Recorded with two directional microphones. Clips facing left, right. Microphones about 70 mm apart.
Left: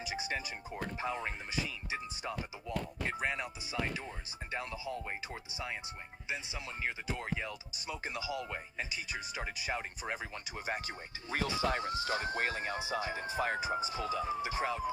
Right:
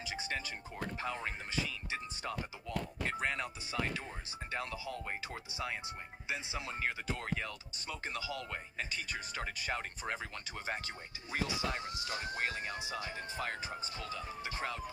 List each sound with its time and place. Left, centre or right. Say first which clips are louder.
0.0 s speech: left 2 dB; centre
6.8 s speech: left 2 dB; centre
11.3 s speech: left 4 dB; left
13.6 s speech: left 8 dB; centre